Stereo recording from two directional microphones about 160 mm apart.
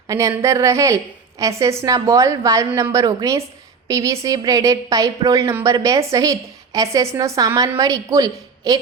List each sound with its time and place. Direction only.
0.1 s a woman's voice: 20° right (ahead or behind)